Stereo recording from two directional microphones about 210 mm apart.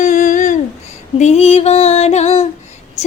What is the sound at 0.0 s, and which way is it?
Humming, 35° left (ahead or behind).